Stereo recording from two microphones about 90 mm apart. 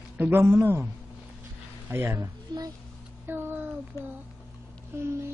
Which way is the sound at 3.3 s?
25° right (ahead or behind).